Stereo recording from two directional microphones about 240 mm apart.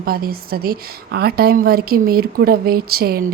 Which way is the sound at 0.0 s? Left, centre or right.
Right.